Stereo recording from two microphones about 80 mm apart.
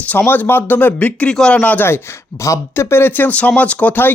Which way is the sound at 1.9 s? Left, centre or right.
Left.